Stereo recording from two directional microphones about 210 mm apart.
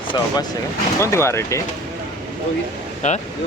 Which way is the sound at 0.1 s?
20° left (ahead or behind).